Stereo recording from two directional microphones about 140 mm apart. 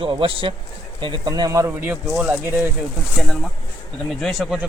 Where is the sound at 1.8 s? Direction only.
10° right (ahead or behind).